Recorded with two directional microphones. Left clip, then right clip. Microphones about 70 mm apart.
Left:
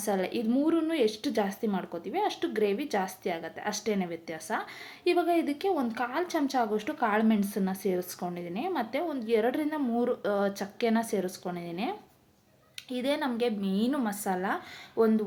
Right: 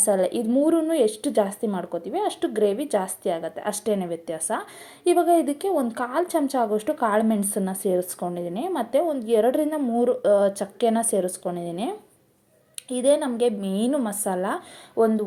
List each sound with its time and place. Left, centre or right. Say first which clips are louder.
0.0 s a woman's voice: right 8 dB; right